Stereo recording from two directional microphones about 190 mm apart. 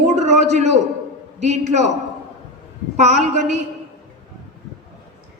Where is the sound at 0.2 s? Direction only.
35° right (ahead or behind).